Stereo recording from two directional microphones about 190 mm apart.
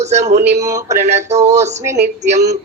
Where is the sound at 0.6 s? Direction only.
15° right (ahead or behind).